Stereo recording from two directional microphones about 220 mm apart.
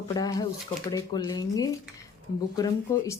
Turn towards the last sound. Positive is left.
turn(degrees=15)  # may be behind; listen again after turning